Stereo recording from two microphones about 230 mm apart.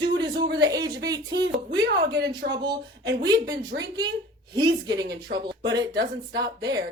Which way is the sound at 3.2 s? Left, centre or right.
Centre.